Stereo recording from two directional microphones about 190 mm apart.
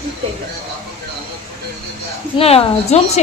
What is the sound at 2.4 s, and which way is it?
Speech, 30° left (ahead or behind).